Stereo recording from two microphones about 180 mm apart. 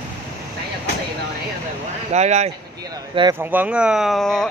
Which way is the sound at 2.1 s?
40° right (ahead or behind).